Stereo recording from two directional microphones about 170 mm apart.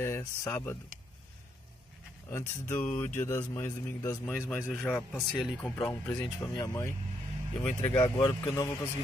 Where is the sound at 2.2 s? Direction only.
15° left (ahead or behind).